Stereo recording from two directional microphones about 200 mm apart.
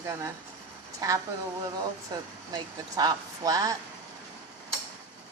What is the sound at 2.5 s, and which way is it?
Speech, 20° right (ahead or behind).